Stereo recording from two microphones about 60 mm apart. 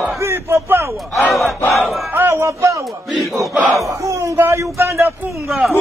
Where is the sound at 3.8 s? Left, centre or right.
Right.